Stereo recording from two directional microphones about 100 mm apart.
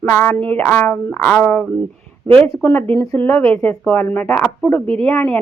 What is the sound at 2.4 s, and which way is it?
A woman's voice, 30° left (ahead or behind).